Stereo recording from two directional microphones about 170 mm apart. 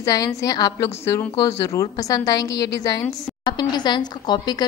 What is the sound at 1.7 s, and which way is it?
A woman's voice, 20° left (ahead or behind).